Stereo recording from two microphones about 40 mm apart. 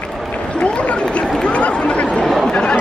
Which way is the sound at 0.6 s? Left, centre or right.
Left.